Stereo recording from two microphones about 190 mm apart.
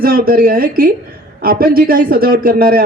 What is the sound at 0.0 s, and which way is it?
Speech, 50° right (ahead or behind).